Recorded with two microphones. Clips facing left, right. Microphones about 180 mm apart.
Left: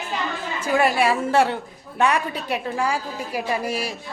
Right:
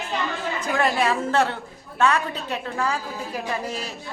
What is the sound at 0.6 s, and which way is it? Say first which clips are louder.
A woman's voice: left 4 dB; 10° left (ahead or behind).